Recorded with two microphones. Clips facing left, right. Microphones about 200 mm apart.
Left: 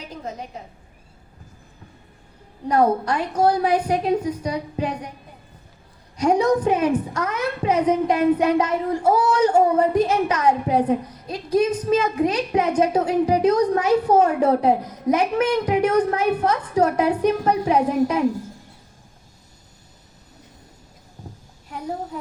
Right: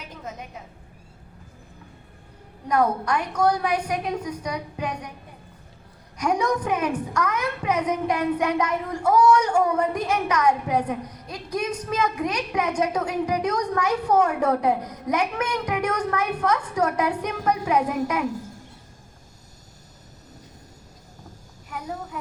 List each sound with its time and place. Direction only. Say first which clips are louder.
0.0 s a sound: left 4 dB; 35° left (ahead or behind)
2.6 s a woman's voice: left 4 dB; 30° left (ahead or behind)
6.2 s a woman's voice: left 6 dB; 25° left (ahead or behind)
22.1 s speech: left 3 dB; 35° left (ahead or behind)